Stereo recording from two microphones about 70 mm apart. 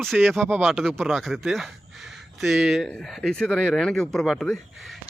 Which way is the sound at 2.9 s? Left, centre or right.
Centre.